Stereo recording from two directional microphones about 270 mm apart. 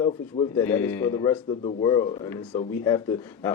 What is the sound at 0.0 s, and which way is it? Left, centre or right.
Speech, centre.